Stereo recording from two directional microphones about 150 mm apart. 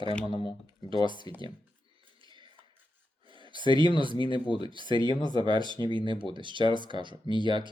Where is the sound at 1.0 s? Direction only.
35° right (ahead or behind).